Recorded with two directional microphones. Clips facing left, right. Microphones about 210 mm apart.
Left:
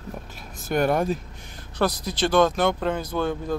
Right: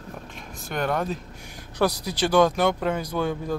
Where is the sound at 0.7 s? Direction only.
10° left (ahead or behind).